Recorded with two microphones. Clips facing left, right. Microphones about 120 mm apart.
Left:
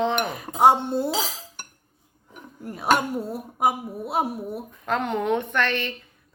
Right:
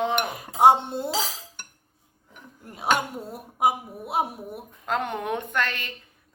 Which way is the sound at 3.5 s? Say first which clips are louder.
Even; 20° right (ahead or behind).